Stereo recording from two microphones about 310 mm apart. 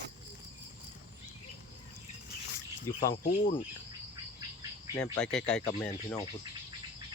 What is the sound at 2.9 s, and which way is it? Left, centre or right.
Speech, centre.